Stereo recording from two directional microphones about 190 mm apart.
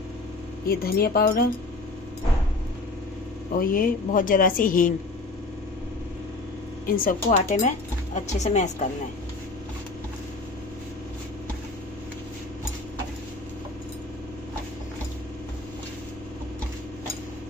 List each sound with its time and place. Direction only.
0.7 s speech: 50° left (ahead or behind)
3.5 s speech: 45° left (ahead or behind)
6.9 s speech: 45° left (ahead or behind)